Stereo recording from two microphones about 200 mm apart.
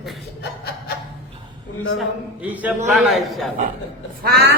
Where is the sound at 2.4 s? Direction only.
10° right (ahead or behind).